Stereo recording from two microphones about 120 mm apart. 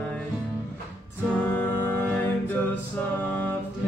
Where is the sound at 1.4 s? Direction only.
15° left (ahead or behind).